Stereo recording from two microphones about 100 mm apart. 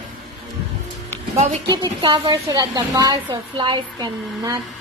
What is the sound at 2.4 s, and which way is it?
Speech, 40° right (ahead or behind).